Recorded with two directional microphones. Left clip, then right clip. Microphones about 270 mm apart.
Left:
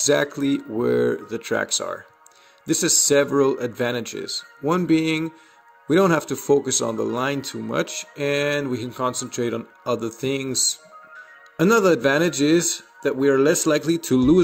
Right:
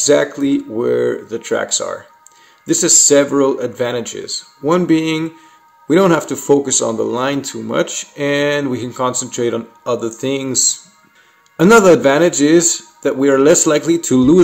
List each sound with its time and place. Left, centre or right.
0.0 s speech: left